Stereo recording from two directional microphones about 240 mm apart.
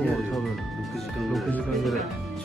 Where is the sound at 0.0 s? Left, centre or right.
Centre.